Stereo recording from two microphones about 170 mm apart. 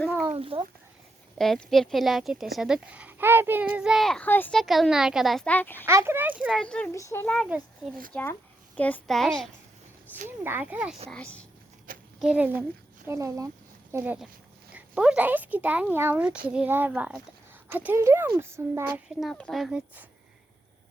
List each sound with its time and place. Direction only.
0.3 s a child's voice: 35° right (ahead or behind)
1.4 s speech: centre (ahead or behind)
5.8 s a child's voice: 15° right (ahead or behind)
6.4 s speech: centre (ahead or behind)
6.9 s a child's voice: 15° left (ahead or behind)
7.3 s speech: centre (ahead or behind)
8.1 s a child's voice: 10° left (ahead or behind)
10.2 s a child's voice: 15° right (ahead or behind)
11.1 s a child's voice: 5° left (ahead or behind)
11.9 s a sound: 55° right (ahead or behind)
12.2 s a child's voice: 10° right (ahead or behind)
19.0 s speech: centre (ahead or behind)